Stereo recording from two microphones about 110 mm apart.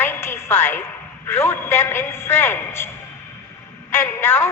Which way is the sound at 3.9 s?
25° left (ahead or behind).